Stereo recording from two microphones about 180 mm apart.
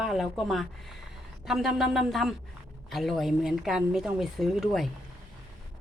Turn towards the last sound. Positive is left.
turn(degrees=0)  # may be behind; listen again after turning